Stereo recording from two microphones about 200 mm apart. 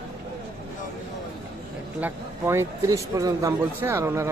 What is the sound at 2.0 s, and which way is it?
Speech, 10° right (ahead or behind).